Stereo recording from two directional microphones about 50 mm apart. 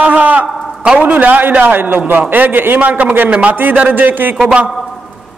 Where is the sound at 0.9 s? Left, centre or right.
Right.